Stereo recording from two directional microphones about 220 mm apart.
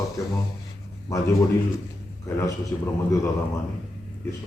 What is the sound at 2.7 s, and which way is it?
Speech, 10° left (ahead or behind).